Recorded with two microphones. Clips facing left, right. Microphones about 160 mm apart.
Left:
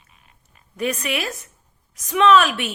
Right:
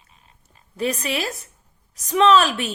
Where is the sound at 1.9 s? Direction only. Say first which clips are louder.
Even; 35° right (ahead or behind).